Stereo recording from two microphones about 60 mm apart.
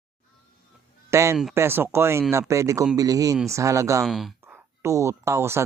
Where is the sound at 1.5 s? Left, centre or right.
Right.